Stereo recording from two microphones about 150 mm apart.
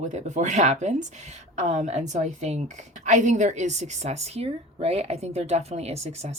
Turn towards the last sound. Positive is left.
turn(degrees=-45)  # may be behind; listen again after turning